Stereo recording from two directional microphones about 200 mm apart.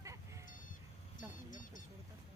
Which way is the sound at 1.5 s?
40° left (ahead or behind).